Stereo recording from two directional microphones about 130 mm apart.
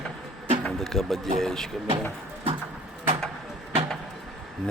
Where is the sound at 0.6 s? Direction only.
Centre (ahead or behind).